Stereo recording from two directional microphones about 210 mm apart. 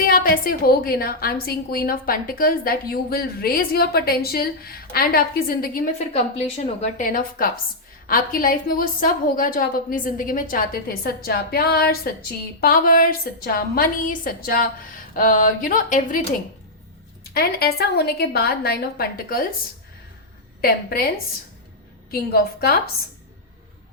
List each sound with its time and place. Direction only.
0.1 s a woman's voice: 45° left (ahead or behind)
17.7 s a woman's voice: 50° left (ahead or behind)
20.6 s a woman's voice: 45° left (ahead or behind)
22.1 s a woman's voice: 45° left (ahead or behind)